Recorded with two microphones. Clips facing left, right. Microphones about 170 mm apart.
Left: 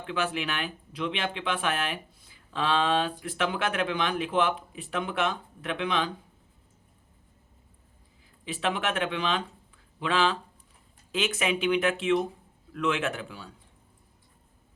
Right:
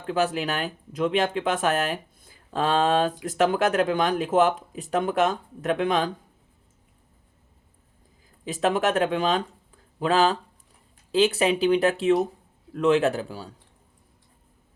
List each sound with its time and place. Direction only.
0.0 s speech: 40° right (ahead or behind)
8.4 s speech: 40° right (ahead or behind)